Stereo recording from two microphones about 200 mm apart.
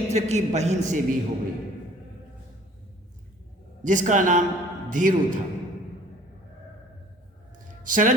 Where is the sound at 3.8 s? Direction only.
40° right (ahead or behind).